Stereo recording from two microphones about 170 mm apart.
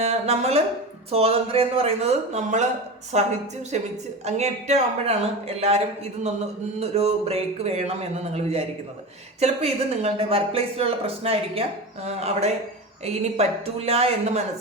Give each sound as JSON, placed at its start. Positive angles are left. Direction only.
{"t": 0.0, "sound": "speech", "side_deg": -40}